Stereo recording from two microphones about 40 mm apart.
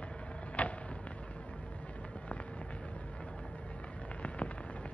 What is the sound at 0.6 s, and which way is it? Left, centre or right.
Fireworks, left.